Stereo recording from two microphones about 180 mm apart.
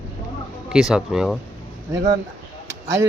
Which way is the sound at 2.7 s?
15° right (ahead or behind).